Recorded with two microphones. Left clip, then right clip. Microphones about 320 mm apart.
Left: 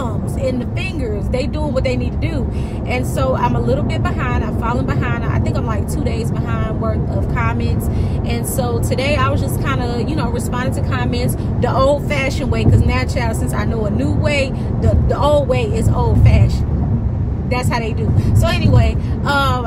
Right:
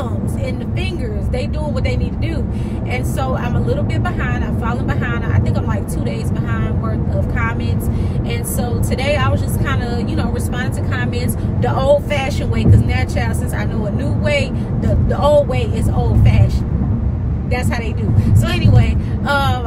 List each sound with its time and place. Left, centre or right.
1.3 s speech: centre
3.2 s speech: centre
8.5 s a woman's voice: centre
11.6 s speech: centre
14.2 s speech: centre
18.4 s speech: centre